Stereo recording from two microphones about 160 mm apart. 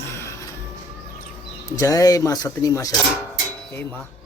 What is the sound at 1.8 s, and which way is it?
Speech, 20° left (ahead or behind).